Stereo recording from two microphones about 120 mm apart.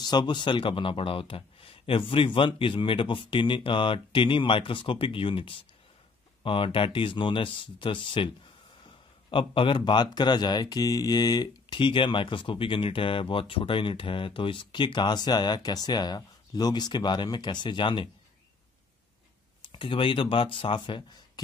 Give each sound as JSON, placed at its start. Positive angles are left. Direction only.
{"t": 0.0, "sound": "speech", "side_deg": 35}
{"t": 9.3, "sound": "speech", "side_deg": 45}
{"t": 19.7, "sound": "speech", "side_deg": 45}